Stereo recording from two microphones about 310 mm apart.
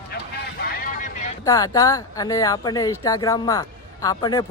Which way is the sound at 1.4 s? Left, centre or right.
Centre.